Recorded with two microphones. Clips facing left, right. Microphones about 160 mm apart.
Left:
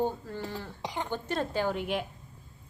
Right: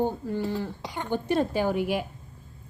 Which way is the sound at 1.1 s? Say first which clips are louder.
Right 9 dB; 10° right (ahead or behind).